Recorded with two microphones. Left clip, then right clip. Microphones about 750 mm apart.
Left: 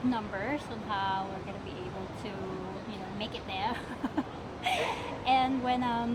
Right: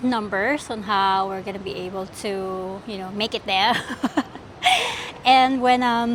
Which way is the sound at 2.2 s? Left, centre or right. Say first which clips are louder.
Right 14 dB; right.